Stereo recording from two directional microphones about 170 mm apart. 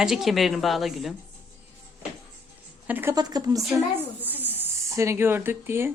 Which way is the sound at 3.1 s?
20° right (ahead or behind).